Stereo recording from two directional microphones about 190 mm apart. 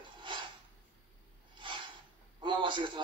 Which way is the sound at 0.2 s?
25° right (ahead or behind).